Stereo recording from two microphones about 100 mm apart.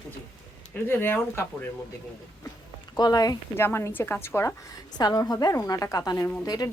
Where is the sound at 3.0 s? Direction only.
40° left (ahead or behind).